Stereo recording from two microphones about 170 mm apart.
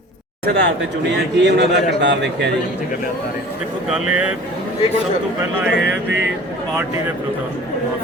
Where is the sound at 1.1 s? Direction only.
85° right.